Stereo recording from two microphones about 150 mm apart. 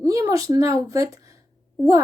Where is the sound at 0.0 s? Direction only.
20° right (ahead or behind).